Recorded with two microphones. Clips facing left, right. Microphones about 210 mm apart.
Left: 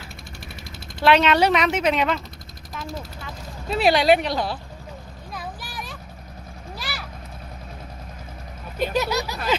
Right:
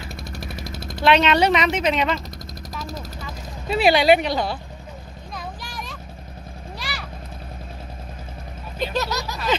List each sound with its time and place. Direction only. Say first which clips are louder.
0.3 s vehicle: right 8 dB; 40° right (ahead or behind)
1.0 s a woman's voice: even; 5° left (ahead or behind)
3.7 s a woman's voice: right 2 dB; centre (ahead or behind)
5.3 s a sound: even; 5° left (ahead or behind)
8.8 s speech: left 2 dB; 10° left (ahead or behind)